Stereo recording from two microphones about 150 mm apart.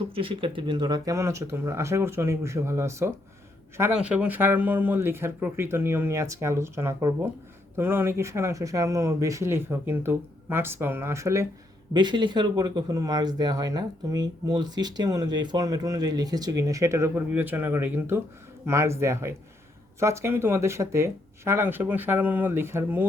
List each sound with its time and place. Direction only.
0.1 s speech: 35° right (ahead or behind); by 11.4 s 20° right (ahead or behind)
11.9 s speech: 30° right (ahead or behind); by 23.0 s 15° right (ahead or behind)